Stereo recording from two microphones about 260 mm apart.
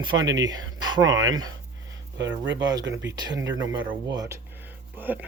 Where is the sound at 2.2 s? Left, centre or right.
Right.